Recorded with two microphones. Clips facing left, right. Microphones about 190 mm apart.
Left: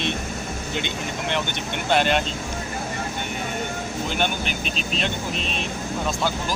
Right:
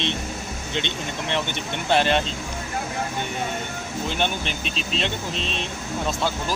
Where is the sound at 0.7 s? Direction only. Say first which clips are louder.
Right 1 dB; 10° left (ahead or behind).